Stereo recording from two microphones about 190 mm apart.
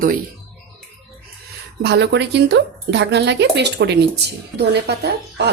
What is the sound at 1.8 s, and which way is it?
A woman's voice, 65° right (ahead or behind).